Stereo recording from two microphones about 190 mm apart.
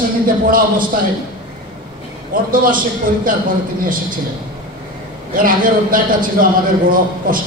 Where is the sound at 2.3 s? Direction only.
45° right (ahead or behind).